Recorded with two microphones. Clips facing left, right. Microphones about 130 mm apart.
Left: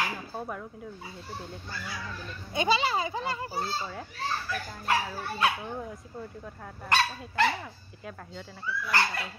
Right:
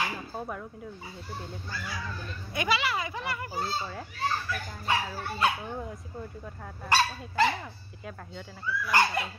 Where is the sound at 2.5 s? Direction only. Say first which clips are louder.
Left 3 dB; 30° left (ahead or behind).